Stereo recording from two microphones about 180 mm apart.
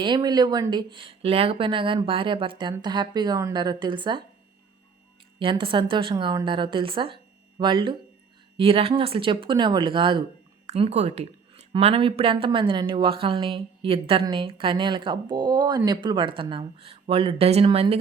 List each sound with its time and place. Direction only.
0.0 s speech: 25° right (ahead or behind)
5.4 s speech: 30° right (ahead or behind)